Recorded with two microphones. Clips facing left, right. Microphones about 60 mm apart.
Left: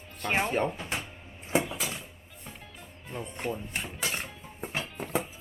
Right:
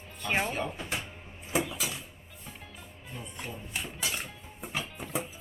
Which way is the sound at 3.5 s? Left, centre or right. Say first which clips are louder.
Left 2 dB; left.